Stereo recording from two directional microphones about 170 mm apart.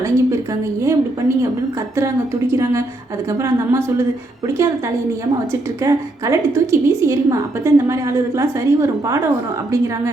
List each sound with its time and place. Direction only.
0.0 s a woman's voice: 20° right (ahead or behind)
2.5 s a woman's voice: 15° right (ahead or behind)
5.3 s a woman's voice: 20° right (ahead or behind)